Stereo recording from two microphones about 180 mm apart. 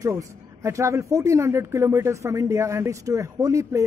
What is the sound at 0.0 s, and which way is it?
A woman's voice, 20° right (ahead or behind).